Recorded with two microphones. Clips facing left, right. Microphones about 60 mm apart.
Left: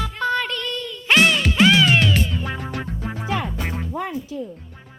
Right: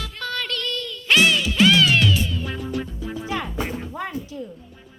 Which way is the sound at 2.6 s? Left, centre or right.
Left.